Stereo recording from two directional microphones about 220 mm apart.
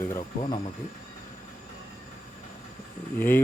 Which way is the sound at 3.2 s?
10° left (ahead or behind).